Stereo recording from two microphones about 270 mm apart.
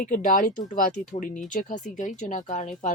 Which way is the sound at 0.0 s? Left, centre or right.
Left.